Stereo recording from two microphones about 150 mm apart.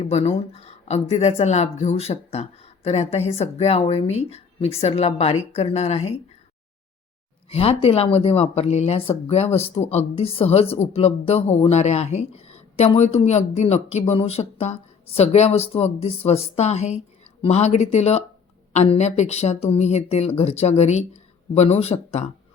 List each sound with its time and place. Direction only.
0.0 s speech: 45° left (ahead or behind)
7.5 s speech: 40° left (ahead or behind)